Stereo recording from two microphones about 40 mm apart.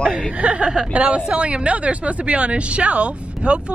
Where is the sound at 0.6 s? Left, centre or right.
Right.